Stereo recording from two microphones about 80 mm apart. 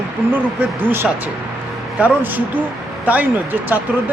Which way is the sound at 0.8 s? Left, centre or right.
Right.